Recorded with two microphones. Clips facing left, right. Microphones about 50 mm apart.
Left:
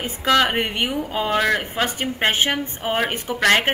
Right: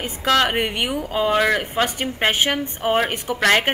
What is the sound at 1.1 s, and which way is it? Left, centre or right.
Speech, centre.